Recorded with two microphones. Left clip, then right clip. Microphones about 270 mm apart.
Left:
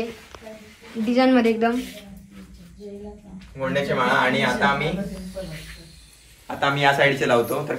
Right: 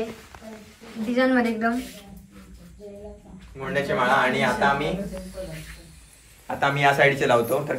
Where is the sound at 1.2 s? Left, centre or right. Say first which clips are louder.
Left 3 dB; centre.